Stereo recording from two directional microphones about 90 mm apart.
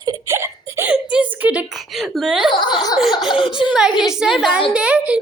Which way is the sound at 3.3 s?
75° left (ahead or behind).